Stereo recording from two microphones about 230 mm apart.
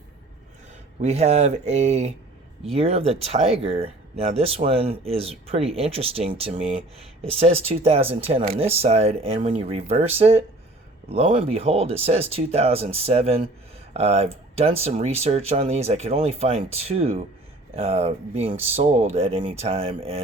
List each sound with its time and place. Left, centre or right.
1.0 s speech: right